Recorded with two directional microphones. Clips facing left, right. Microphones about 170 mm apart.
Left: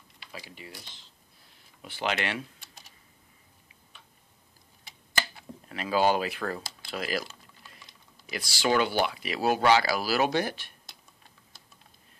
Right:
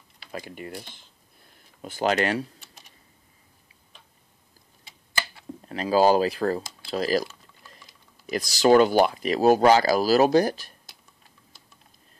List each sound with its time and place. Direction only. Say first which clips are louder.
0.3 s speech: right 9 dB; 50° right (ahead or behind)
1.8 s speech: right 7 dB; 40° right (ahead or behind)
5.7 s speech: right 6 dB; 35° right (ahead or behind)
8.3 s speech: right 9 dB; 40° right (ahead or behind)